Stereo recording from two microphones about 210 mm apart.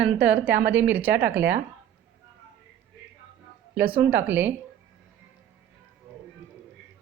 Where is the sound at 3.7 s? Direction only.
5° right (ahead or behind).